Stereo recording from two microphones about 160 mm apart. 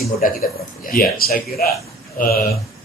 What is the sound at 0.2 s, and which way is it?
Speech, 60° left (ahead or behind).